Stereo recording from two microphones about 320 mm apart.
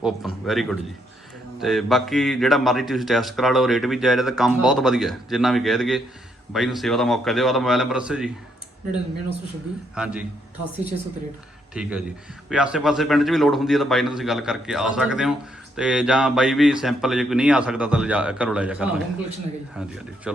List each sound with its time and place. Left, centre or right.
0.0 s a man's voice: centre
9.9 s a man's voice: centre
11.7 s a man's voice: centre
20.3 s speech: centre